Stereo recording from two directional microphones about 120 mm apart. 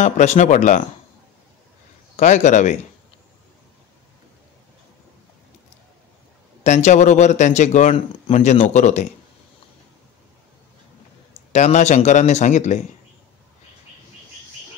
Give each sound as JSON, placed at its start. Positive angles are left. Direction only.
{"t": 0.0, "sound": "speech", "side_deg": 80}
{"t": 2.1, "sound": "speech", "side_deg": 85}
{"t": 6.6, "sound": "speech", "side_deg": 80}
{"t": 7.9, "sound": "speech", "side_deg": 65}
{"t": 11.5, "sound": "speech", "side_deg": 75}